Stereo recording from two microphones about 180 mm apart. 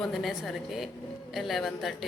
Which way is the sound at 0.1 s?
Centre (ahead or behind).